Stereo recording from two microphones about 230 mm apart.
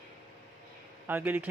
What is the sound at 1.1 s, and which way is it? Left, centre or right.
Speech, centre.